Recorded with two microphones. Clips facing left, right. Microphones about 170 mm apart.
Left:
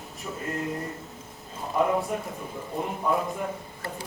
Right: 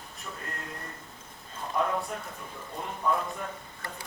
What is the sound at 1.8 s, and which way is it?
Speech, 20° left (ahead or behind).